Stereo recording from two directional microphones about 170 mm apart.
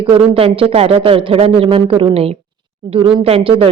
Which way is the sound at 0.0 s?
30° right (ahead or behind).